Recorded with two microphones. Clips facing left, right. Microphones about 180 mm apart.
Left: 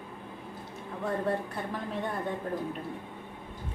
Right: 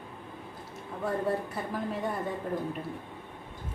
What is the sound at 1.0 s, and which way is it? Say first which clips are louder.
Speech: right 1 dB; centre (ahead or behind).